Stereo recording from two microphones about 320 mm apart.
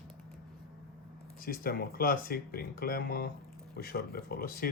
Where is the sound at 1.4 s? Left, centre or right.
Left.